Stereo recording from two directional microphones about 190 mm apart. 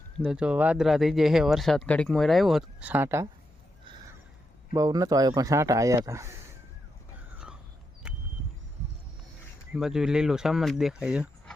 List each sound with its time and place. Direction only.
0.2 s speech: 5° right (ahead or behind)
4.7 s speech: 20° right (ahead or behind)
8.0 s a sound: 5° right (ahead or behind)
9.7 s speech: 5° right (ahead or behind)